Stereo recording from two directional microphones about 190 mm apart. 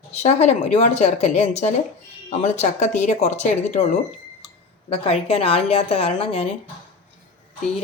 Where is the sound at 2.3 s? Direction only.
35° left (ahead or behind).